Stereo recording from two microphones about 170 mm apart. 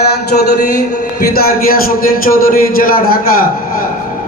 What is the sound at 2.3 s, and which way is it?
A man's voice, 55° left (ahead or behind).